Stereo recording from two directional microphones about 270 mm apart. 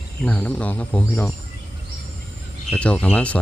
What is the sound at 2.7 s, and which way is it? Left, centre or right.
Speech, centre.